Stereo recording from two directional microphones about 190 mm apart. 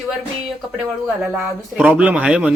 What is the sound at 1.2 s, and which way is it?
A man's voice, 5° right (ahead or behind).